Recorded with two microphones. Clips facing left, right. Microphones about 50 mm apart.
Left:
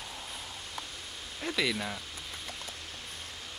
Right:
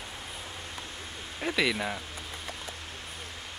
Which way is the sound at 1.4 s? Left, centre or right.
Centre.